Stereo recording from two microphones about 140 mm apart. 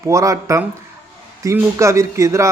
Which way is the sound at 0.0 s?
20° right (ahead or behind).